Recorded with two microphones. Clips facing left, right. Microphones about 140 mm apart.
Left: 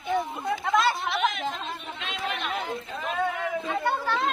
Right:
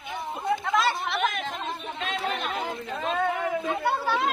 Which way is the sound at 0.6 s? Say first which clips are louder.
Left 5 dB; centre (ahead or behind).